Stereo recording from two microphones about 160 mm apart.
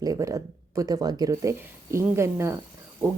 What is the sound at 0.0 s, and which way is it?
Speech, 20° right (ahead or behind).